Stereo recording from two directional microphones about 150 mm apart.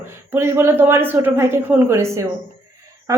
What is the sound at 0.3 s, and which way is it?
A woman's voice, 15° right (ahead or behind).